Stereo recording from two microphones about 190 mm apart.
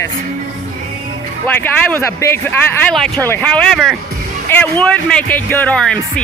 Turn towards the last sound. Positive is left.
turn(degrees=5)  # may be behind; listen again after turning